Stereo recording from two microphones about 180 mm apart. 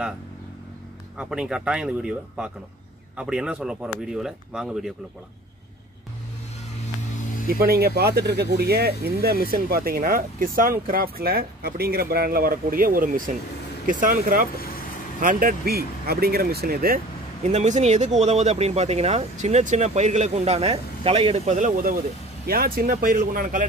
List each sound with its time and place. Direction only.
1.1 s speech: 5° right (ahead or behind)
7.4 s speech: 55° right (ahead or behind)
17.5 s speech: 40° right (ahead or behind)